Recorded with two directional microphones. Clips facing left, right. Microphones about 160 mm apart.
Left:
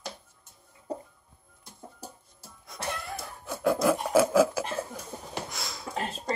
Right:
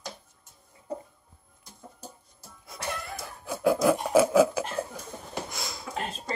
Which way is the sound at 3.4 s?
Centre (ahead or behind).